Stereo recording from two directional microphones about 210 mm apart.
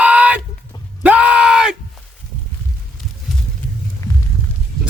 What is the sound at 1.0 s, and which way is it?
Yell, 5° right (ahead or behind).